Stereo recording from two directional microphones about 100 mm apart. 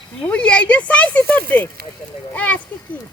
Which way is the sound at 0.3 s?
10° left (ahead or behind).